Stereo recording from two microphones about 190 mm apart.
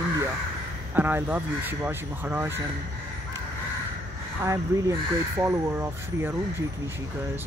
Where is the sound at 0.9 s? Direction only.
10° right (ahead or behind).